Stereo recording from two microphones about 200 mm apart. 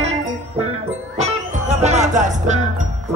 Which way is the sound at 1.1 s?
35° right (ahead or behind).